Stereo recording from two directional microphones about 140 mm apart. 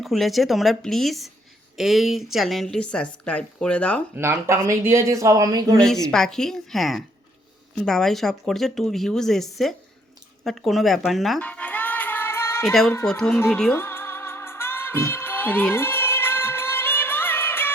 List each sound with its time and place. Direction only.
0.0 s a woman's voice: centre (ahead or behind)
4.1 s speech: 20° right (ahead or behind)
5.7 s a woman's voice: 5° left (ahead or behind)
11.3 s music: 10° left (ahead or behind)
13.1 s a woman's voice: 5° left (ahead or behind)
13.6 s music: 15° left (ahead or behind)